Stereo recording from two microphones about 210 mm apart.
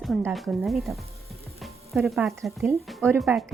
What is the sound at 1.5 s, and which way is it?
Sizzle, centre (ahead or behind).